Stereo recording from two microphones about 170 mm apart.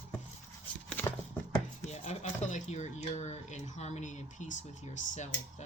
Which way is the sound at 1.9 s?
40° left (ahead or behind).